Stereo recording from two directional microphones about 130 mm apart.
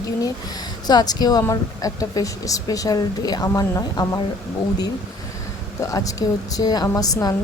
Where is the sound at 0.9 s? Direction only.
30° left (ahead or behind).